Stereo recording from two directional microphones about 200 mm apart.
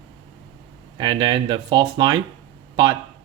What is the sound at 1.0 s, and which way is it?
Speech, 25° right (ahead or behind).